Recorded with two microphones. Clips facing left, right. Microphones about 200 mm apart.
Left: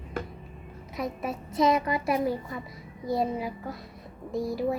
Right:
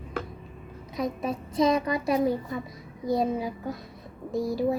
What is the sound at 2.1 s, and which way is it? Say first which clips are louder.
Child singing: right 5 dB; 20° right (ahead or behind).